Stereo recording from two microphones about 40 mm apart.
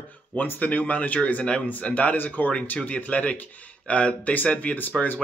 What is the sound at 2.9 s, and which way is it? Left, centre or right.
Speech, left.